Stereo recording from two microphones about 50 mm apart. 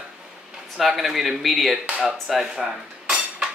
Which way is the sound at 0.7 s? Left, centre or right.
Centre.